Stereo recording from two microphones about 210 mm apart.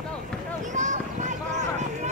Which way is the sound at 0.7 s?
35° right (ahead or behind).